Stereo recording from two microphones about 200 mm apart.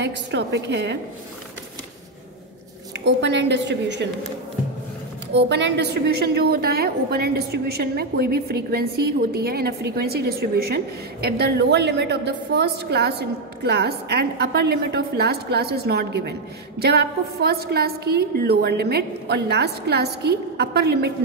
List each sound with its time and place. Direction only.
0.0 s a woman's voice: 60° right (ahead or behind)
3.0 s a woman's voice: 60° right (ahead or behind)
5.3 s a woman's voice: 60° right (ahead or behind)